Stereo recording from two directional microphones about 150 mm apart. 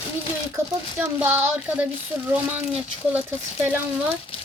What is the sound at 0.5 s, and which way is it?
Speech, 15° right (ahead or behind).